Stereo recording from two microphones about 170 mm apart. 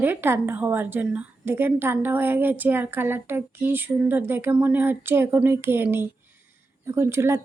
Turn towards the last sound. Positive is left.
turn(degrees=-15)  # may be behind; listen again after turning